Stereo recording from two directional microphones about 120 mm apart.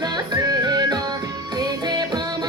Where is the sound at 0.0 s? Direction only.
35° right (ahead or behind).